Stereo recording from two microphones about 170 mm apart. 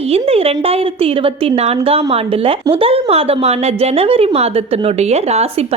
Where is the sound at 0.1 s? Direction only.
35° right (ahead or behind).